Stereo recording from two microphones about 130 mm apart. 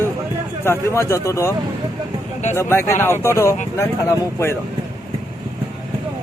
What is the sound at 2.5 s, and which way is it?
A man's voice, 20° left (ahead or behind).